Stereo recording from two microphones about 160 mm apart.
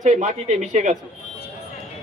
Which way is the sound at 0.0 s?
45° right (ahead or behind).